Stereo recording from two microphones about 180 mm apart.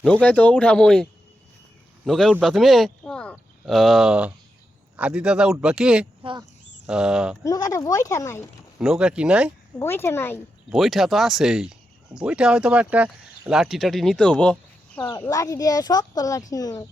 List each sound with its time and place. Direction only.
0.0 s speech: 5° left (ahead or behind)
2.0 s speech: centre (ahead or behind)
7.4 s speech: 20° left (ahead or behind)
8.8 s speech: 5° right (ahead or behind)
9.7 s speech: 15° left (ahead or behind)
10.7 s speech: centre (ahead or behind)
15.2 s speech: 20° left (ahead or behind)